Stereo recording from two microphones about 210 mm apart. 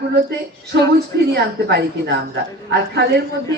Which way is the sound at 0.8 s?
50° right (ahead or behind).